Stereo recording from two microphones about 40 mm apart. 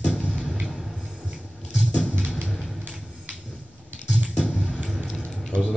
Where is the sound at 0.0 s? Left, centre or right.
Left.